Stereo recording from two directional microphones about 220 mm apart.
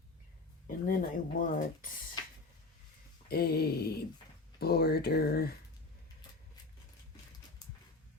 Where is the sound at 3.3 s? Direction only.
45° left (ahead or behind).